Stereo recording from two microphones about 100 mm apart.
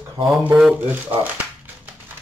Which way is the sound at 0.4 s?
10° right (ahead or behind).